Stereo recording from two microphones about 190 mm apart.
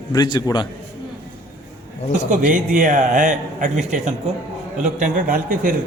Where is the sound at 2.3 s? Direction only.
45° right (ahead or behind).